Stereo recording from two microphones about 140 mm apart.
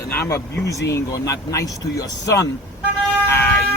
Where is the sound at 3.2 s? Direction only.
15° left (ahead or behind).